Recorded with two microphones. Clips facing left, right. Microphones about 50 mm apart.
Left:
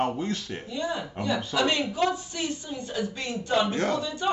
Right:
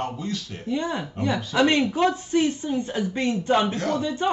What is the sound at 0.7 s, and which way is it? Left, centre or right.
A woman's voice, right.